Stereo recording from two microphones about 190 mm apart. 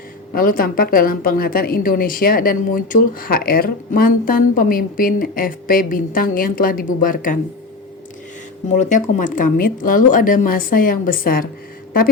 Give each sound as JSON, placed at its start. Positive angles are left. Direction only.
{"t": 0.3, "sound": "a woman's voice", "side_deg": 50}
{"t": 8.7, "sound": "a woman's voice", "side_deg": 40}